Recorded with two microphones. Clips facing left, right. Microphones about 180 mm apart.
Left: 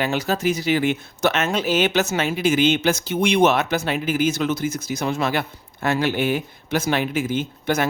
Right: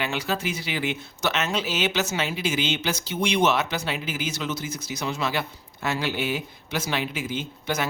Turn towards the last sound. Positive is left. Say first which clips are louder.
# left 6 dB
turn(degrees=50)  # may be behind; listen again after turning